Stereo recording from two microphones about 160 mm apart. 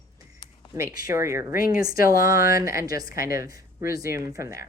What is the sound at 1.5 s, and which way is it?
Speech, 65° left (ahead or behind).